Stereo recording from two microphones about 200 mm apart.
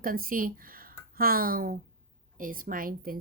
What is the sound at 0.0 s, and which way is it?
Speech, 45° right (ahead or behind).